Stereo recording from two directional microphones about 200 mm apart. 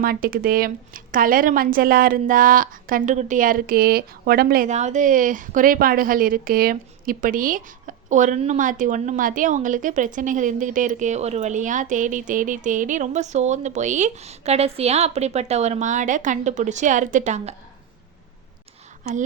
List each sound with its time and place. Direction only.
0.0 s speech: 45° right (ahead or behind)